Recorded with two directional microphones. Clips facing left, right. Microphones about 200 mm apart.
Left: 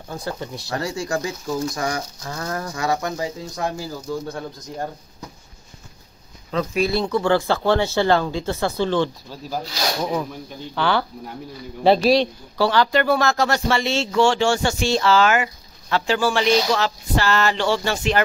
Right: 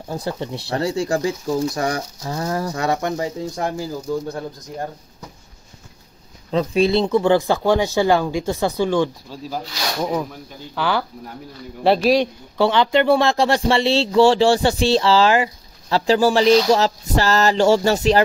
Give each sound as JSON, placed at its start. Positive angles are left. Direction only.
{"t": 0.1, "sound": "speech", "side_deg": -30}
{"t": 6.5, "sound": "speech", "side_deg": -30}
{"t": 10.7, "sound": "speech", "side_deg": -5}
{"t": 12.5, "sound": "speech", "side_deg": -20}